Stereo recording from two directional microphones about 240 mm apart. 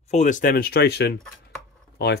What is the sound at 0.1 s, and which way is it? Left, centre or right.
Speech, left.